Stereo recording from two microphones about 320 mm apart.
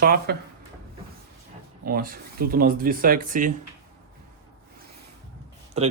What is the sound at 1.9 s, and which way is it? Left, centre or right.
Speech, right.